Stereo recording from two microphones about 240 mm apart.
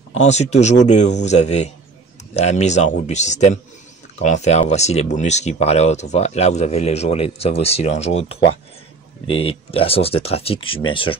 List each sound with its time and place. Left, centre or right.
0.1 s speech: left